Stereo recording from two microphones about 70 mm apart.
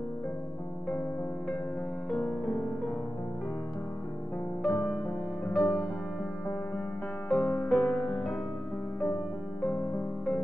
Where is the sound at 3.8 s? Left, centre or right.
Left.